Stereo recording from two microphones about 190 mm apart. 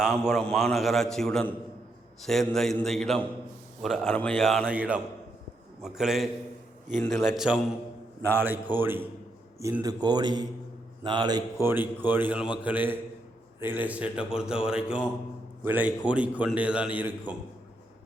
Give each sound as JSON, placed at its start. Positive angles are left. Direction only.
{"t": 0.0, "sound": "a man's voice", "side_deg": 0}